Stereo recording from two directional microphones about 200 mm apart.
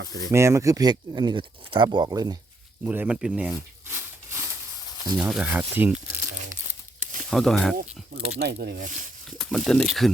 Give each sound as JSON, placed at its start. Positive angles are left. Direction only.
{"t": 0.3, "sound": "speech", "side_deg": -15}
{"t": 2.8, "sound": "speech", "side_deg": -10}
{"t": 3.5, "sound": "a sound", "side_deg": -10}
{"t": 5.1, "sound": "speech", "side_deg": -5}
{"t": 7.3, "sound": "speech", "side_deg": 0}
{"t": 8.4, "sound": "speech", "side_deg": -55}
{"t": 9.4, "sound": "speech", "side_deg": 5}